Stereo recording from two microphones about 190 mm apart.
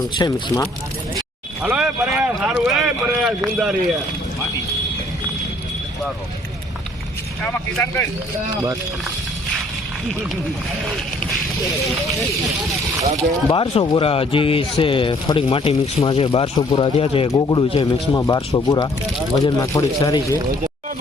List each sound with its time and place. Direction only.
0.1 s speech: 25° left (ahead or behind)
1.6 s speech: 5° right (ahead or behind)
7.4 s speech: 10° left (ahead or behind)
13.5 s speech: 25° left (ahead or behind)